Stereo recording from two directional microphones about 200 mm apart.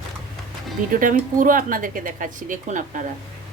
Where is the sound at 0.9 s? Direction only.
40° right (ahead or behind).